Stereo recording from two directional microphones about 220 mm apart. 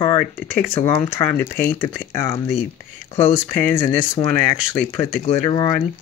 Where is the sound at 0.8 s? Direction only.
10° left (ahead or behind).